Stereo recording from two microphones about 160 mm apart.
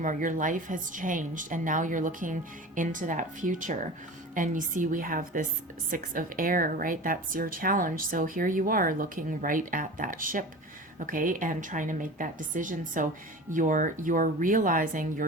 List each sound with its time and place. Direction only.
0.0 s a woman's voice: 55° right (ahead or behind)